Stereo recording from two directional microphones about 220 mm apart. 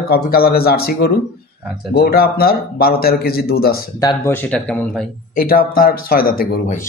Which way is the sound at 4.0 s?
15° left (ahead or behind).